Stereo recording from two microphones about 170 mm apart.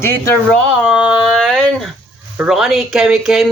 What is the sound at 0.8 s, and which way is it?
Speech, 5° right (ahead or behind).